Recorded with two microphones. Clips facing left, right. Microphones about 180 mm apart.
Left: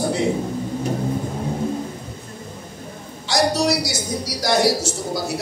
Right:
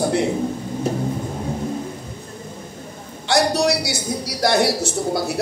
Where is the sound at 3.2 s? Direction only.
60° right (ahead or behind).